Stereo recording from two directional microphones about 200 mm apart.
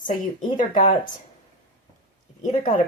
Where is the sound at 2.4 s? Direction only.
40° left (ahead or behind).